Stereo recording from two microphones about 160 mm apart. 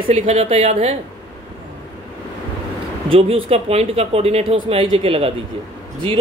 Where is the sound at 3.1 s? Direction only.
35° right (ahead or behind).